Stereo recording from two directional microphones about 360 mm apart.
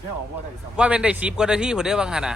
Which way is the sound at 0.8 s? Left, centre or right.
Centre.